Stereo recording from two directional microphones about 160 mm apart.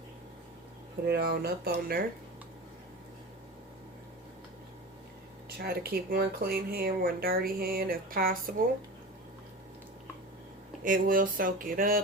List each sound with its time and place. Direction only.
1.0 s speech: 85° right
5.5 s speech: 75° right (ahead or behind)
10.8 s a sound: 60° right (ahead or behind)